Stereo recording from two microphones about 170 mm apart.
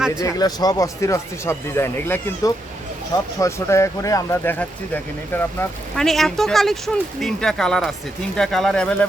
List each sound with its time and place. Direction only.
0.2 s speech: 20° left (ahead or behind)